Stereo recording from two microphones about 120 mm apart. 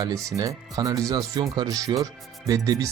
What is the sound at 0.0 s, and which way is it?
Speech, 30° right (ahead or behind).